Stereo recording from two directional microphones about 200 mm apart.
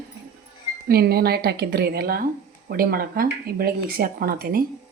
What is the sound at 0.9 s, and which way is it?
Speech, 50° right (ahead or behind).